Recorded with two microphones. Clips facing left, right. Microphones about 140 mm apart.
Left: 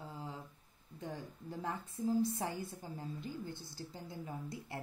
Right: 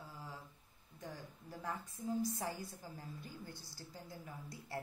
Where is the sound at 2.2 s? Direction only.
25° left (ahead or behind).